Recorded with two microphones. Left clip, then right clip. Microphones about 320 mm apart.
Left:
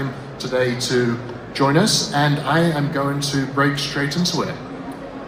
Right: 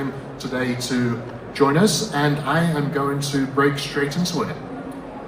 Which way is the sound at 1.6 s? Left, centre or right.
Left.